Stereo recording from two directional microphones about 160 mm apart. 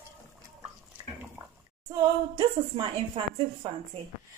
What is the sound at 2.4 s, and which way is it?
A woman's voice, 30° right (ahead or behind).